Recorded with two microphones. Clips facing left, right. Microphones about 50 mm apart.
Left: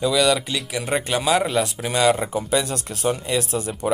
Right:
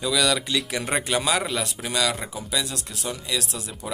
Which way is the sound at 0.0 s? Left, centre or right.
Centre.